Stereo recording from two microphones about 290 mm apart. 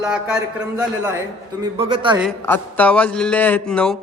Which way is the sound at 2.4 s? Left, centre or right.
Centre.